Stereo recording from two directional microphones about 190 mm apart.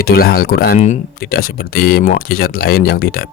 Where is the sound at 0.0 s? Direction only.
50° left (ahead or behind).